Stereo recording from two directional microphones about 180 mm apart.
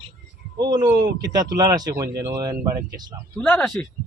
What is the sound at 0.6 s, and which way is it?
Speech, 20° right (ahead or behind).